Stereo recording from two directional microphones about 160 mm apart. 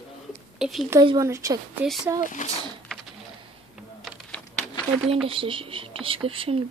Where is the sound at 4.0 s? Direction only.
5° left (ahead or behind).